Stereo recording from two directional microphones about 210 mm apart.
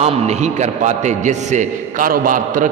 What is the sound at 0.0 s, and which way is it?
A man's voice, 30° right (ahead or behind).